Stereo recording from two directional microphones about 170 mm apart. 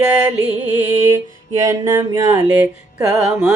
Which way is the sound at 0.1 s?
10° right (ahead or behind).